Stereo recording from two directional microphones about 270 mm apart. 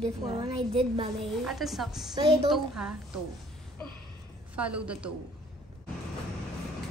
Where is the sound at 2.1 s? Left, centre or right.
Centre.